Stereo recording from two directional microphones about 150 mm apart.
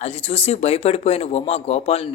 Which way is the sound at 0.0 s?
40° left (ahead or behind).